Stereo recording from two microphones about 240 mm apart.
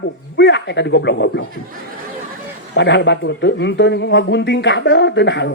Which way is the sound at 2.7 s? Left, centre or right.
Left.